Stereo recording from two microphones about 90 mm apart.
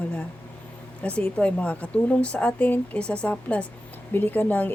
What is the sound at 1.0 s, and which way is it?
Speech, 15° left (ahead or behind).